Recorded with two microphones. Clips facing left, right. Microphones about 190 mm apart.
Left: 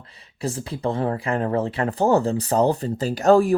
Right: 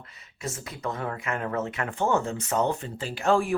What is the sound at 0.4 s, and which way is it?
Speech, 30° left (ahead or behind).